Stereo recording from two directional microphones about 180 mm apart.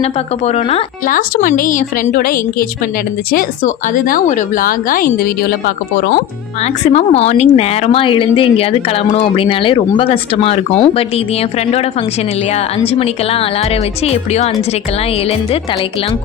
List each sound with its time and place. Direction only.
0.0 s a woman's voice: 35° left (ahead or behind); by 6.1 s 55° left (ahead or behind)
6.9 s a woman's voice: 35° left (ahead or behind)
12.5 s a woman's voice: 35° left (ahead or behind)